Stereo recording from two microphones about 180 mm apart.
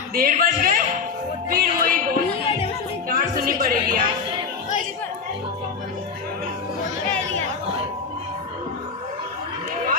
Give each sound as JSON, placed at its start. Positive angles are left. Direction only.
{"t": 0.1, "sound": "speech", "side_deg": -55}
{"t": 1.5, "sound": "music", "side_deg": -55}
{"t": 2.4, "sound": "music", "side_deg": 30}
{"t": 3.1, "sound": "music", "side_deg": -55}